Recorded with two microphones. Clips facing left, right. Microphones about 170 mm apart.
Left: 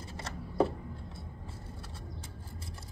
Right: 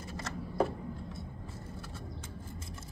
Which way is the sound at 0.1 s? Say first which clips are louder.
Right 4 dB; 30° left (ahead or behind).